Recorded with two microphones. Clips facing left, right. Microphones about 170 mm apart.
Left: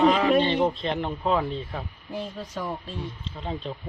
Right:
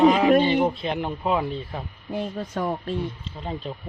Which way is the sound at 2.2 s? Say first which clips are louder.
Right 5 dB; 55° right (ahead or behind).